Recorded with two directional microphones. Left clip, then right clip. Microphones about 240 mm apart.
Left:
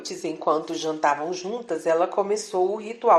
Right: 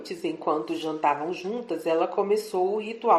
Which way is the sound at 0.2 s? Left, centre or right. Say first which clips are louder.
Left 3 dB; left.